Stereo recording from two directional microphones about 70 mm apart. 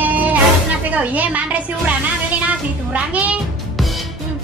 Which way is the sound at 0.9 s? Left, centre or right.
Right.